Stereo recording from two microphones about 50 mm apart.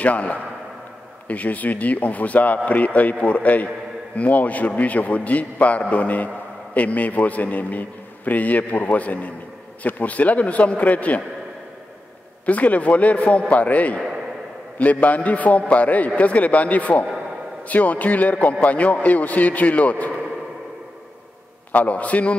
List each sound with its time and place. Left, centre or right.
0.0 s a man's voice: left
12.4 s a man's voice: left
21.7 s a man's voice: left